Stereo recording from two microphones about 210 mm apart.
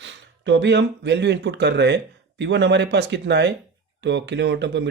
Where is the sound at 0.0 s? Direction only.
60° right (ahead or behind).